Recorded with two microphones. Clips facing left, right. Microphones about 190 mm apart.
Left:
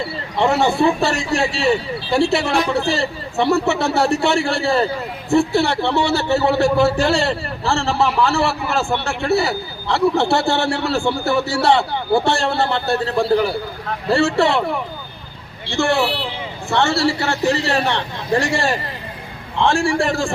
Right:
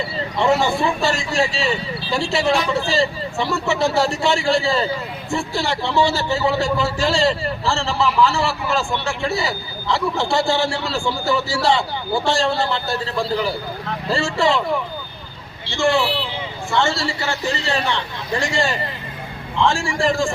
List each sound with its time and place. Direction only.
1.0 s a man's voice: 65° left (ahead or behind)
15.7 s a man's voice: 65° left (ahead or behind)